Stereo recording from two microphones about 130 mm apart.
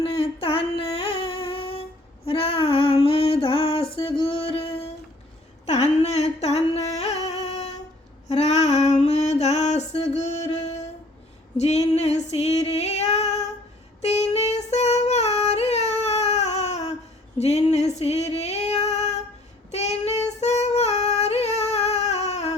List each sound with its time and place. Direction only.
0.0 s a sound: 45° left (ahead or behind)
6.0 s music: 55° left (ahead or behind)
8.3 s female singing: 55° left (ahead or behind)
14.0 s child singing: 55° left (ahead or behind)
17.3 s female singing: 55° left (ahead or behind)